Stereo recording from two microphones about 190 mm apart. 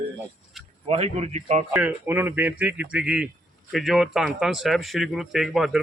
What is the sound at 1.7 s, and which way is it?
Speech, 10° right (ahead or behind).